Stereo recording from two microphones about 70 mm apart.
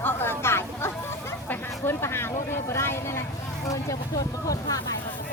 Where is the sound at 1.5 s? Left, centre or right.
Left.